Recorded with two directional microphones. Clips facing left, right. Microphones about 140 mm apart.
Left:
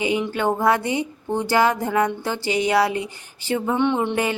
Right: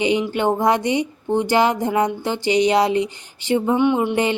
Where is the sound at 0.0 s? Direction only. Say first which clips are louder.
Right 3 dB; 20° right (ahead or behind).